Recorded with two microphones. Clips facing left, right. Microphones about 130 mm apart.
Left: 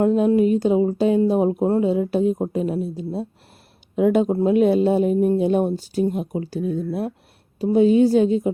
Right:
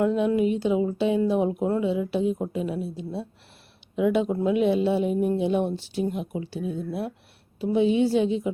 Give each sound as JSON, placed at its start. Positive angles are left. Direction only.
{"t": 0.0, "sound": "a woman's voice", "side_deg": 40}